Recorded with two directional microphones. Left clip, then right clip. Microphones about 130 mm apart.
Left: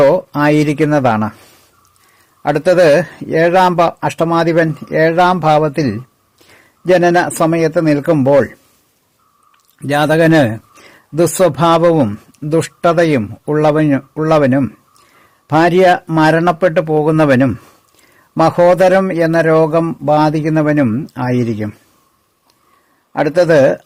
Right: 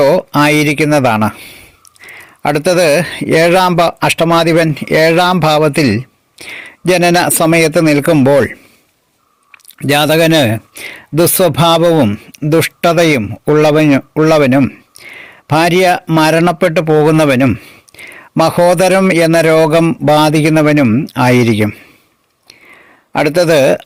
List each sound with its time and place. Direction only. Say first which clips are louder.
0.0 s speech: right 1 dB; 20° right (ahead or behind)
9.7 s a man's voice: right 2 dB; 25° right (ahead or behind)
23.1 s speech: right 1 dB; 25° right (ahead or behind)